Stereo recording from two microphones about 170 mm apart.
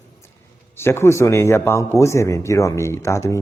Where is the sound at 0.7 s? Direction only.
15° left (ahead or behind).